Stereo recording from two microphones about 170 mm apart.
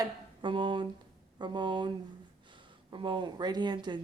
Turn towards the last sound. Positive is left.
turn(degrees=-25)  # may be behind; listen again after turning